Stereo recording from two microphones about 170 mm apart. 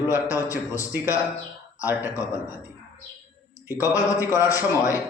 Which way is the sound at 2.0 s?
20° left (ahead or behind).